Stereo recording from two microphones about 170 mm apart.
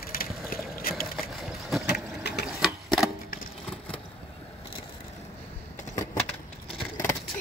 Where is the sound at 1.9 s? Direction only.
75° left (ahead or behind).